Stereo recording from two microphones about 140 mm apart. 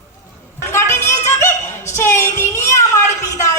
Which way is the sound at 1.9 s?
20° left (ahead or behind).